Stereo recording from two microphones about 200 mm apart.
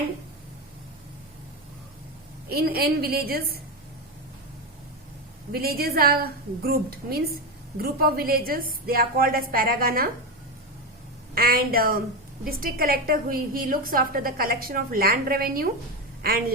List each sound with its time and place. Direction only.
2.5 s a woman's voice: 50° right (ahead or behind)
5.5 s a woman's voice: 50° right (ahead or behind)
11.3 s a woman's voice: 50° right (ahead or behind)